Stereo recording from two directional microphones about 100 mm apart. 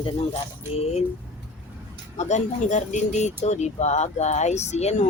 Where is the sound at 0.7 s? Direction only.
90° left.